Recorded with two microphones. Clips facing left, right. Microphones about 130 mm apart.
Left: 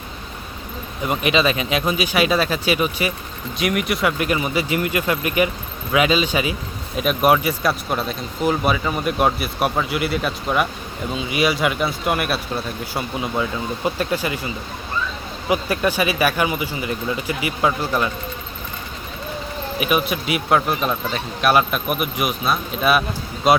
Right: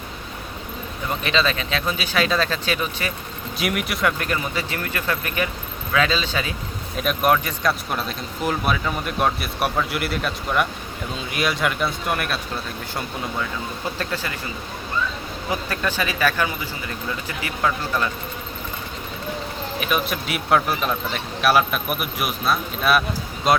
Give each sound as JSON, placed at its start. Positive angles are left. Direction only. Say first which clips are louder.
{"t": 1.0, "sound": "speech", "louder": "left 4 dB", "side_deg": 15}
{"t": 3.6, "sound": "speech", "louder": "left 3 dB", "side_deg": 0}
{"t": 4.2, "sound": "speech", "louder": "left 5 dB", "side_deg": 15}
{"t": 13.4, "sound": "speech", "louder": "left 5 dB", "side_deg": 15}
{"t": 15.4, "sound": "speech", "louder": "left 6 dB", "side_deg": 15}
{"t": 19.8, "sound": "speech", "louder": "left 4 dB", "side_deg": 5}